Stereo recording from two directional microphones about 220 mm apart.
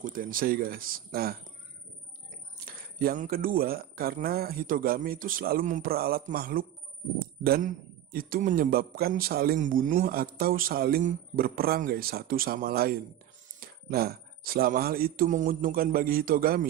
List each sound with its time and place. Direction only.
0.0 s a man's voice: 40° right (ahead or behind)
2.6 s a man's voice: 40° right (ahead or behind)